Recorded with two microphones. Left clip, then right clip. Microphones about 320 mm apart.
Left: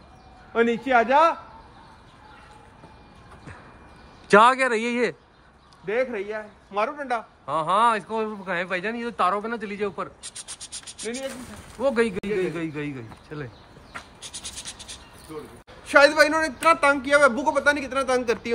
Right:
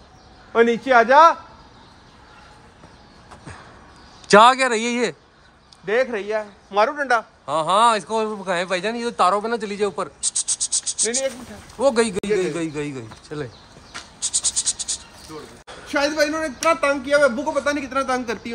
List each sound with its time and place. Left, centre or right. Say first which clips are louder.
0.5 s speech: right 5 dB; centre
4.3 s a man's voice: right 4 dB; centre
5.9 s a man's voice: right 5 dB; right
7.4 s speech: right 3 dB; centre
14.2 s insect: right 17 dB; centre
15.9 s a man's voice: left 4 dB; centre